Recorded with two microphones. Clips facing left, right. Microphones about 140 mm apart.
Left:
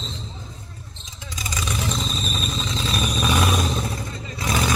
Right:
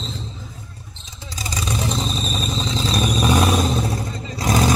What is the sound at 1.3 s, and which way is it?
Vehicle, 35° right (ahead or behind).